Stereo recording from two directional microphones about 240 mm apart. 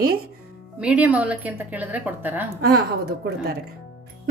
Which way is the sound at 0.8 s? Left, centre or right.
Centre.